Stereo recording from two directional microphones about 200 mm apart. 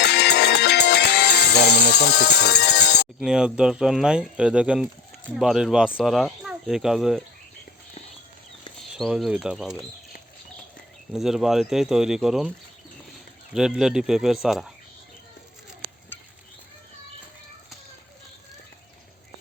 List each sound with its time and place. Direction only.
0.0 s music: 55° left (ahead or behind)
3.2 s speech: 5° right (ahead or behind)
9.0 s speech: centre (ahead or behind)
11.1 s speech: centre (ahead or behind)
13.5 s speech: 5° right (ahead or behind)